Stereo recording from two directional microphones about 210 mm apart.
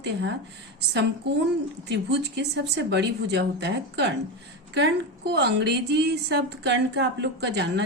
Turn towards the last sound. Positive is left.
turn(degrees=-55)  # may be behind; listen again after turning